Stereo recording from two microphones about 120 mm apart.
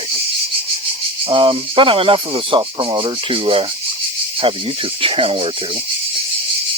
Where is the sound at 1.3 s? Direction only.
50° right (ahead or behind).